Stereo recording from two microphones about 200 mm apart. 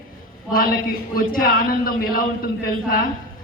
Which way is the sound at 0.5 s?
45° left (ahead or behind).